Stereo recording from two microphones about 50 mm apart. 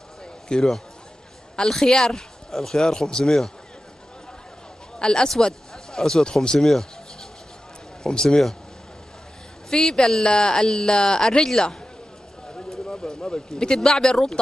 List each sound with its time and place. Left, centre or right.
0.2 s a sound: centre
1.6 s speech: centre
4.9 s speech: centre
9.7 s speech: centre
12.4 s clip-clop: centre
12.8 s speech: centre